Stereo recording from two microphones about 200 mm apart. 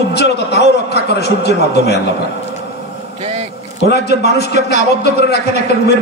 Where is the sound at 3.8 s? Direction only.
55° left (ahead or behind).